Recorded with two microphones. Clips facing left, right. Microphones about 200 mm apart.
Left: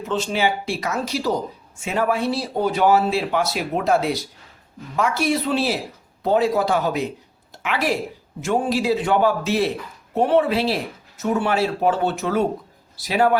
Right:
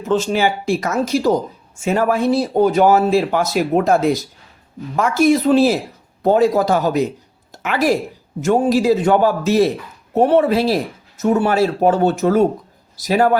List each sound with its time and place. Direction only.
0.1 s a woman's voice: 45° right (ahead or behind)